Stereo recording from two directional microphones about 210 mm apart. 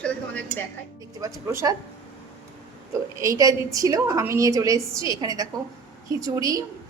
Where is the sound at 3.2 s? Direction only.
15° right (ahead or behind).